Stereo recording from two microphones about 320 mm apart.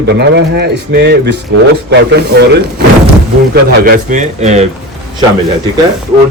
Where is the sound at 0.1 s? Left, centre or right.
Right.